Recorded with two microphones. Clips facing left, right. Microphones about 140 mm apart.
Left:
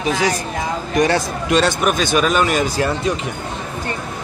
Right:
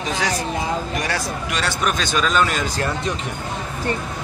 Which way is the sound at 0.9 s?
25° left (ahead or behind).